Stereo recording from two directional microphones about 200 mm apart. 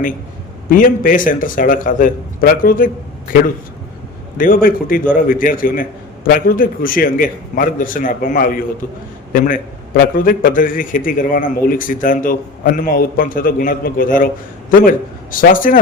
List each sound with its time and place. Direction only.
0.7 s a man's voice: 45° left (ahead or behind)
4.4 s a man's voice: 45° left (ahead or behind)